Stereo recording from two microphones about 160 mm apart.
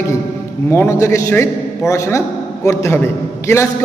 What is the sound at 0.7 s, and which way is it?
A man's voice, 15° left (ahead or behind).